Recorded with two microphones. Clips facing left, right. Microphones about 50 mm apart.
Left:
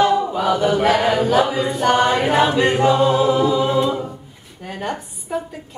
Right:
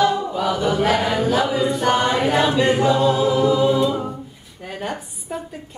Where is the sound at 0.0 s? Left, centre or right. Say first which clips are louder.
Left 2 dB; left.